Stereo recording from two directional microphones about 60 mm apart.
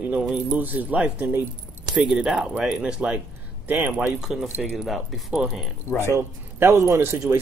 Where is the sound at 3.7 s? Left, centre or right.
Right.